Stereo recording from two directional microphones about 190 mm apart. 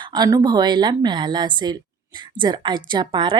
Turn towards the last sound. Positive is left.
turn(degrees=-25)  # may be behind; listen again after turning